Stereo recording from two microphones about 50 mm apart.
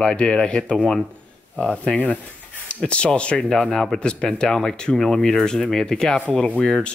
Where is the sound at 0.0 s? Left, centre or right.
Centre.